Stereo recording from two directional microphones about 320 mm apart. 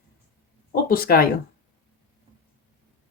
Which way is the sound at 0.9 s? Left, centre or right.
Left.